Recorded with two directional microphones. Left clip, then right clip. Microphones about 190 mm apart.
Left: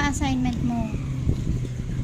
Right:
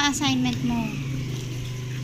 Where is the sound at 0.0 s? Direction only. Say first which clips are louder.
Right 2 dB; 30° left (ahead or behind).